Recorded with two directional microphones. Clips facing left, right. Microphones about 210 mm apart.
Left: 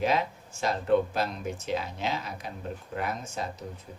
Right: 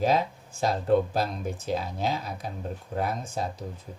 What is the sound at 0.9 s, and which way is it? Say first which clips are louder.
Speech: right 1 dB; 35° right (ahead or behind).